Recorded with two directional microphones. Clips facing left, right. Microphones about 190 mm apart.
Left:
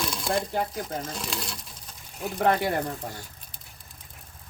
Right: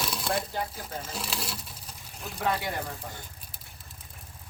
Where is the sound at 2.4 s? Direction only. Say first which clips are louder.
Left 6 dB; 55° left (ahead or behind).